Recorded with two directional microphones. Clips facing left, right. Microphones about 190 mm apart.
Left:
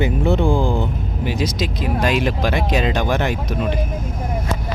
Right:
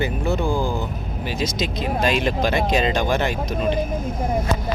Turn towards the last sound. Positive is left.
turn(degrees=15)  # may be behind; listen again after turning